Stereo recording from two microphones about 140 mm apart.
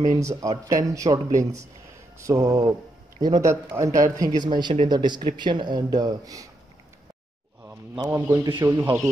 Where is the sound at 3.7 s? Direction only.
25° right (ahead or behind).